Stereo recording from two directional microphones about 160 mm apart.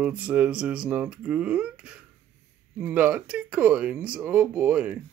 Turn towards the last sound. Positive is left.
turn(degrees=-10)  # may be behind; listen again after turning